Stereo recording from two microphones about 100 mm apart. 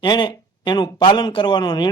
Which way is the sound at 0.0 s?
50° left (ahead or behind).